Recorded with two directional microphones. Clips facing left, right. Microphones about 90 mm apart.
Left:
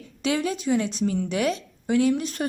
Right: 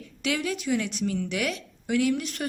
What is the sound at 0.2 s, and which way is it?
Speech, 30° left (ahead or behind).